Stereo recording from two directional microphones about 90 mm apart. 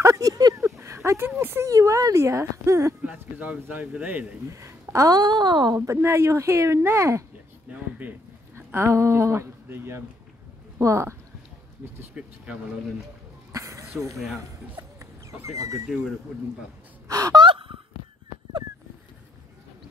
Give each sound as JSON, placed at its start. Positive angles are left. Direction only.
{"t": 0.0, "sound": "a sound", "side_deg": -40}
{"t": 1.7, "sound": "speech", "side_deg": -40}
{"t": 3.0, "sound": "speech", "side_deg": -15}
{"t": 4.5, "sound": "speech", "side_deg": -35}
{"t": 5.9, "sound": "speech", "side_deg": -25}
{"t": 7.7, "sound": "a sound", "side_deg": -15}
{"t": 8.5, "sound": "speech", "side_deg": -30}
{"t": 12.2, "sound": "speech", "side_deg": -10}
{"t": 13.5, "sound": "a sound", "side_deg": -35}
{"t": 14.1, "sound": "speech", "side_deg": 0}
{"t": 15.3, "sound": "speech", "side_deg": -35}
{"t": 17.1, "sound": "speech", "side_deg": -40}
{"t": 17.4, "sound": "gasp", "side_deg": -75}